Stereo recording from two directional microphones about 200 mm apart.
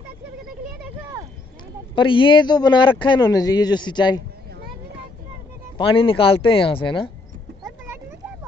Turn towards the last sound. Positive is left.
turn(degrees=25)  # may be behind; listen again after turning